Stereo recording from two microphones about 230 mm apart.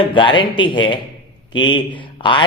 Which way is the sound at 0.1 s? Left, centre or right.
Left.